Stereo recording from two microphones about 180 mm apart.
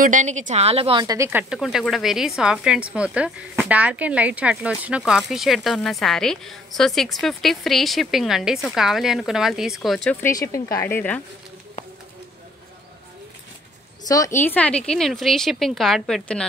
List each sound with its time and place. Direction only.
0.0 s a woman's voice: 45° right (ahead or behind)
1.0 s speech: 15° right (ahead or behind)
1.5 s a woman's voice: centre (ahead or behind)
10.2 s a woman's voice: 15° left (ahead or behind)
14.0 s a woman's voice: 20° left (ahead or behind); by 16.4 s 5° left (ahead or behind)